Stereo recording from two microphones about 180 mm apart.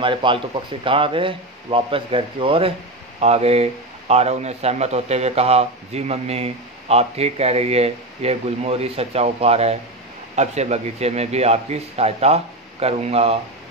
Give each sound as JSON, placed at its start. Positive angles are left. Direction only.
{"t": 0.0, "sound": "a man's voice", "side_deg": -30}